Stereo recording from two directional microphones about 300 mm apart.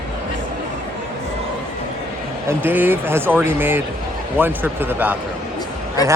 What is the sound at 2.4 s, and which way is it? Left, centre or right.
Speech, centre.